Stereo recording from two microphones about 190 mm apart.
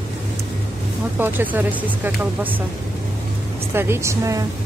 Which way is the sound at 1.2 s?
10° right (ahead or behind).